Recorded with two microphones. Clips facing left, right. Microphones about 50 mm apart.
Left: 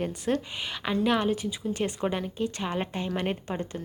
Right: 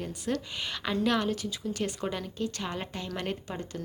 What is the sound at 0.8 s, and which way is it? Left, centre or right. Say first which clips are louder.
A woman's voice: left 3 dB; centre.